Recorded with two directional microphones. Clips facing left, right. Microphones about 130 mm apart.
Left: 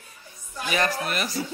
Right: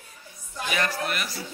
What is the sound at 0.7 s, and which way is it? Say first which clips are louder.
Speech: left 3 dB; 35° left (ahead or behind).